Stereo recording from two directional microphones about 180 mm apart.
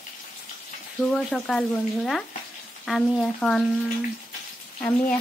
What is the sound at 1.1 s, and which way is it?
Speech, 5° left (ahead or behind).